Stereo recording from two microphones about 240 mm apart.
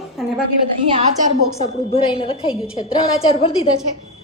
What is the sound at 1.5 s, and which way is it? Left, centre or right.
A woman's voice, left.